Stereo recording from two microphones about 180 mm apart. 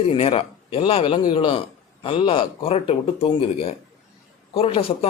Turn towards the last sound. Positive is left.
turn(degrees=30)  # may be behind; listen again after turning